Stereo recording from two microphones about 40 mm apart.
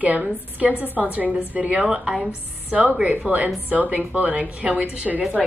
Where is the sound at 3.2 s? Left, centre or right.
Right.